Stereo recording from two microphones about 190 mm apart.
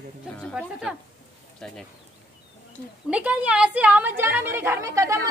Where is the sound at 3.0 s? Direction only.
5° right (ahead or behind).